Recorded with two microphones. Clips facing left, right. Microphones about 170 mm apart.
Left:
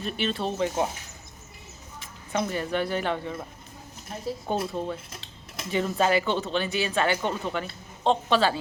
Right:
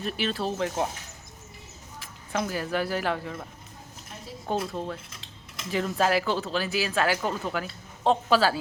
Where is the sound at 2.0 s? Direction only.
Centre (ahead or behind).